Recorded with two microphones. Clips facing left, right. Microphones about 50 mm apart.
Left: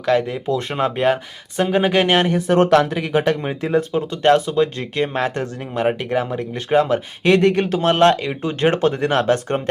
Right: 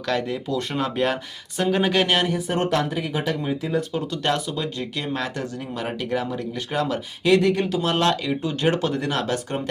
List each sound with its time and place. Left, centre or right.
0.0 s speech: centre
0.4 s speech: left
2.5 s speech: left
3.8 s speech: left
7.3 s speech: left